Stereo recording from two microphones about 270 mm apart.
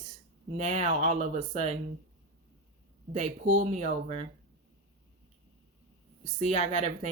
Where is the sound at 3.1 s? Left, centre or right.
Right.